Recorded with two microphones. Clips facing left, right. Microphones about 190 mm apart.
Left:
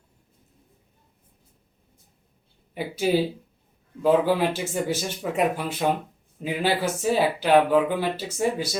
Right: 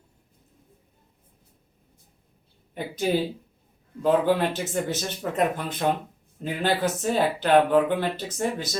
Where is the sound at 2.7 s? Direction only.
10° left (ahead or behind).